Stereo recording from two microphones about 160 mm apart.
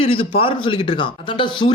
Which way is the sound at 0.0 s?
35° left (ahead or behind).